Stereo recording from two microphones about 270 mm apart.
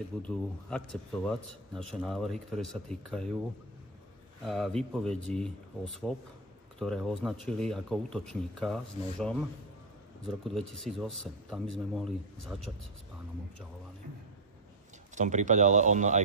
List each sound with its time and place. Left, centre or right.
0.3 s speech: centre
4.5 s speech: centre
15.1 s speech: right